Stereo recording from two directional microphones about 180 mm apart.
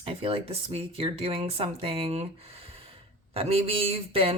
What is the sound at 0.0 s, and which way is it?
Speech, 30° right (ahead or behind).